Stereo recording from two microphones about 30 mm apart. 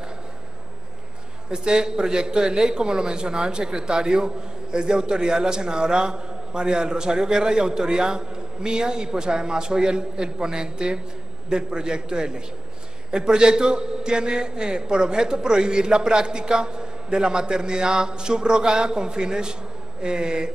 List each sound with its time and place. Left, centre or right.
1.5 s a man's voice: right